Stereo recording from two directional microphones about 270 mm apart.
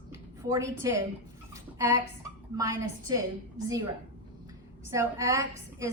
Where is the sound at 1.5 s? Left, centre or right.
Centre.